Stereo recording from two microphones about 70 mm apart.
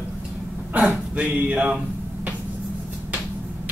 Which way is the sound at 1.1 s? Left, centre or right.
Centre.